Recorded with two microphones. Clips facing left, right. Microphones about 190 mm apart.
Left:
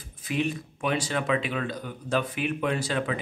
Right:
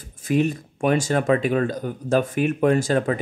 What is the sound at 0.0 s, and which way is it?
Speech, 45° right (ahead or behind).